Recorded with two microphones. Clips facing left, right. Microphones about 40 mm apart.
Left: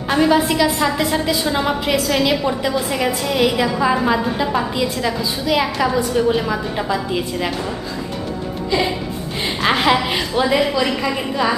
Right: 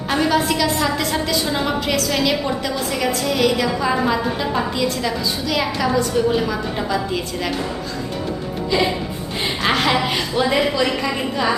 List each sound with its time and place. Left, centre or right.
0.1 s a woman's voice: centre
2.6 s a woman's voice: centre
8.7 s a woman's voice: centre